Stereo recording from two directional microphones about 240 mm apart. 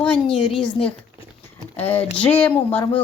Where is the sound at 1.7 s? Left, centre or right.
Centre.